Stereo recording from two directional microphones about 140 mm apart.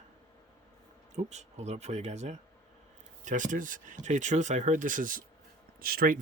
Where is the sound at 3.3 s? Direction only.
65° right (ahead or behind).